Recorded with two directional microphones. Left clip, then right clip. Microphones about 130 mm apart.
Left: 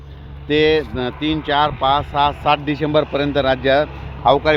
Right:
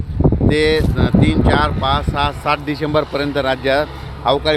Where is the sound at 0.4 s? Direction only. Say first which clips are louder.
Left 2 dB; 40° left (ahead or behind).